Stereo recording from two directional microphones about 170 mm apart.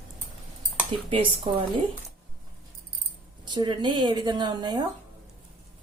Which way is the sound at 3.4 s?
25° right (ahead or behind).